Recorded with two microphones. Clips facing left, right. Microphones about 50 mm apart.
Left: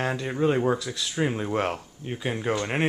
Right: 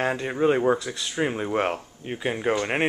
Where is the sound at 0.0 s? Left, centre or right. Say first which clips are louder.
Right 2 dB; centre.